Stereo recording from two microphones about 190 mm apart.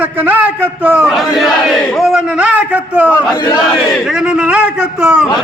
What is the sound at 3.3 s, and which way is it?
Battle cry, 20° left (ahead or behind).